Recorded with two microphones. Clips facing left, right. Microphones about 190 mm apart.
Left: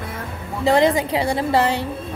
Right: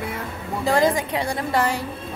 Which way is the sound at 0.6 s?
25° left (ahead or behind).